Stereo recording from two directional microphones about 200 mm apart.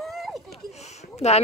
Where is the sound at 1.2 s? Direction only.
35° left (ahead or behind).